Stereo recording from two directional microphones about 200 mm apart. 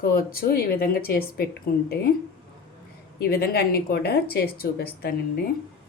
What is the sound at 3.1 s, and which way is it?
A woman's voice, 50° left (ahead or behind).